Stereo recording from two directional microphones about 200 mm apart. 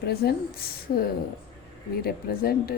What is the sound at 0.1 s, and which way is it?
Speech, 50° left (ahead or behind).